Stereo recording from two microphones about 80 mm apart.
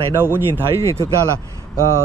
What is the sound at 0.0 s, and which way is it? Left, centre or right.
Speech, right.